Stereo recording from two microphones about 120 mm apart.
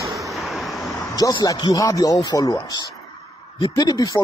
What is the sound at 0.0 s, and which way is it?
Vehicle, 25° right (ahead or behind).